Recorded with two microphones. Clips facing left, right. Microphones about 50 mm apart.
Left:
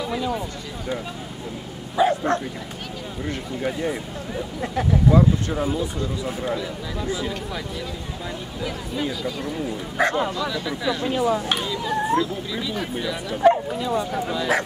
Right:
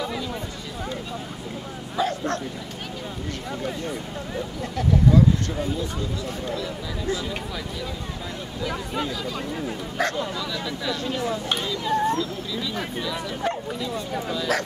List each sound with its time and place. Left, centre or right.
0.0 s a sound: centre
2.0 s speech: centre
3.8 s speech: centre
4.7 s speech: left
5.6 s speech: centre
6.2 s speech: centre
9.0 s speech: centre
10.0 s speech: centre